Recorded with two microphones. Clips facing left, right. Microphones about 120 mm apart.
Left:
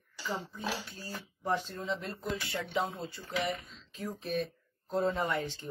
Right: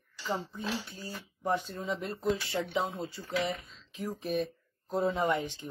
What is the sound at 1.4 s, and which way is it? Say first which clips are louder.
Speech: right 2 dB; 15° right (ahead or behind).